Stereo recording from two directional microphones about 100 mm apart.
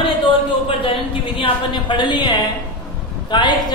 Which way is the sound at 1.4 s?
55° left (ahead or behind).